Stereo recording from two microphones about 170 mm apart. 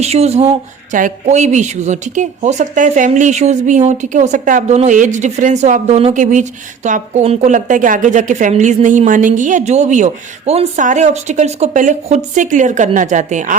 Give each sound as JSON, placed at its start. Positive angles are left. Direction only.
{"t": 0.0, "sound": "speech", "side_deg": -40}